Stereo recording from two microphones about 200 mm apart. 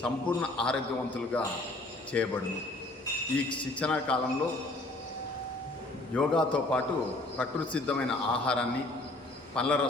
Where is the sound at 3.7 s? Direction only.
5° left (ahead or behind).